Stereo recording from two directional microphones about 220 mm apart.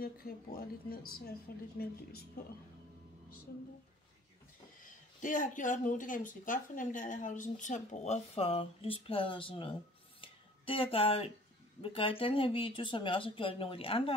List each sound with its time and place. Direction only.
0.0 s speech: 45° left (ahead or behind)
4.8 s speech: 35° left (ahead or behind)
10.2 s music: 25° left (ahead or behind)
11.8 s speech: 25° left (ahead or behind)